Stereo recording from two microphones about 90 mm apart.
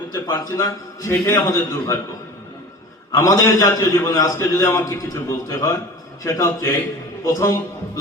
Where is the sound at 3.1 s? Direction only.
40° left (ahead or behind).